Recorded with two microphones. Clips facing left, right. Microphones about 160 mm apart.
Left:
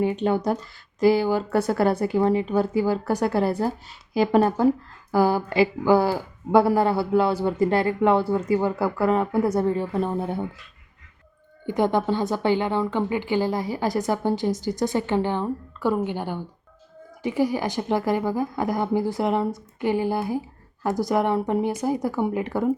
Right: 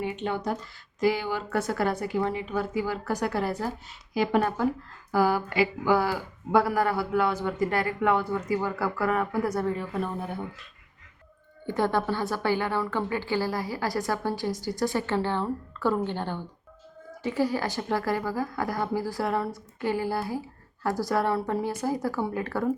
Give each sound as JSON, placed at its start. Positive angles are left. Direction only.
{"t": 0.0, "sound": "a woman's voice", "side_deg": 40}
{"t": 11.6, "sound": "speech", "side_deg": 15}